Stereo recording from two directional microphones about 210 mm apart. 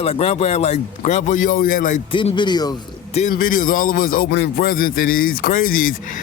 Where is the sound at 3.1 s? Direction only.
35° left (ahead or behind).